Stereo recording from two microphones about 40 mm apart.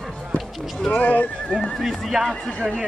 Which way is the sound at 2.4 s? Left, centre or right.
Left.